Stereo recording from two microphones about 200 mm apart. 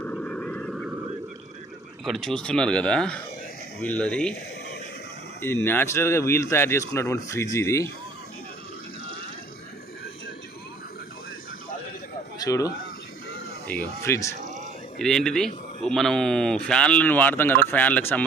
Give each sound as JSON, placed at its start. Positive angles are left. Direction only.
{"t": 0.0, "sound": "vehicle", "side_deg": 5}
{"t": 2.0, "sound": "speech", "side_deg": 0}
{"t": 5.4, "sound": "speech", "side_deg": 10}
{"t": 12.4, "sound": "speech", "side_deg": 15}
{"t": 14.9, "sound": "speech", "side_deg": 5}